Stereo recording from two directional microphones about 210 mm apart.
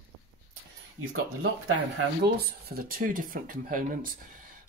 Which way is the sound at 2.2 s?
45° right (ahead or behind).